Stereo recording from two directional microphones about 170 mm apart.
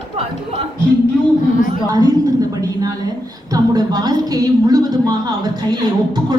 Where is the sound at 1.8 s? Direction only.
20° right (ahead or behind).